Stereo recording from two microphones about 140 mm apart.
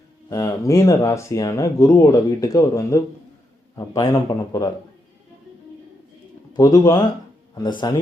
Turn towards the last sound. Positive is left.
turn(degrees=30)  # may be behind; listen again after turning